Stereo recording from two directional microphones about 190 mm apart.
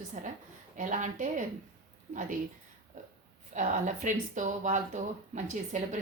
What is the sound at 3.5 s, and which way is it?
Speech, 40° right (ahead or behind).